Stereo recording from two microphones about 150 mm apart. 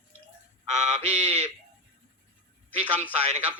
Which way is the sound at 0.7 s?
50° right (ahead or behind).